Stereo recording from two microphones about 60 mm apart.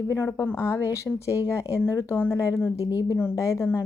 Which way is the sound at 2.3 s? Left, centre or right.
Left.